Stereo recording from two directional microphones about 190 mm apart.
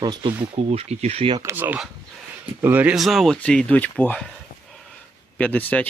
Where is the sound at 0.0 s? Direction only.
25° right (ahead or behind).